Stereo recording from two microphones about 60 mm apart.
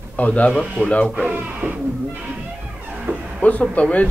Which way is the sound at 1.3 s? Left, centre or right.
Right.